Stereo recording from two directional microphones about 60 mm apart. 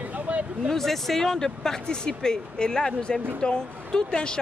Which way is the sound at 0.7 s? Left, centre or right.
Centre.